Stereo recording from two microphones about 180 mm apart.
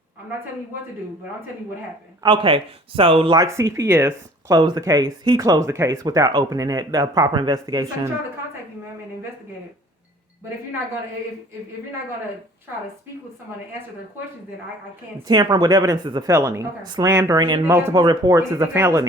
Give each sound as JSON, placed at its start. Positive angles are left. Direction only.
{"t": 2.2, "sound": "speech", "side_deg": -30}
{"t": 15.3, "sound": "speech", "side_deg": -25}